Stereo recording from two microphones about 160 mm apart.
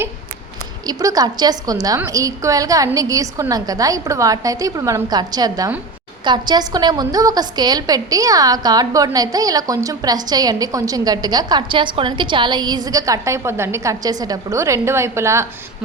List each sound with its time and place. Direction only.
0.9 s a woman's voice: 20° right (ahead or behind)